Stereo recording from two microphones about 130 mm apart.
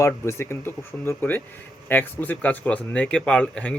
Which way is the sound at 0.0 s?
20° left (ahead or behind).